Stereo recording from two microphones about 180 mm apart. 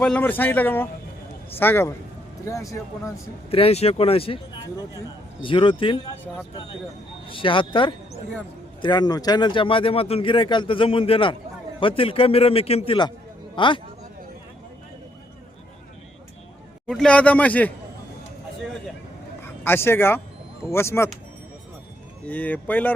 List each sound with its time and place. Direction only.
0.0 s speech: 5° left (ahead or behind)
3.5 s a man's voice: 35° left (ahead or behind)
5.4 s speech: 30° left (ahead or behind)
7.3 s a man's voice: 30° left (ahead or behind)
16.8 s speech: 5° left (ahead or behind)
19.4 s speech: 10° left (ahead or behind)
22.3 s speech: 10° left (ahead or behind)